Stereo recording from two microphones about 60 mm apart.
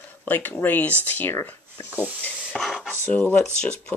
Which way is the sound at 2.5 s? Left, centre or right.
Centre.